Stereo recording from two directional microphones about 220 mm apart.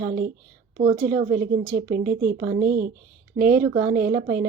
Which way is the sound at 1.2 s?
45° right (ahead or behind).